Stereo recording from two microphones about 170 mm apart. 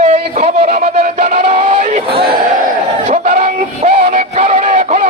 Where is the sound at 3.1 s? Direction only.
45° right (ahead or behind).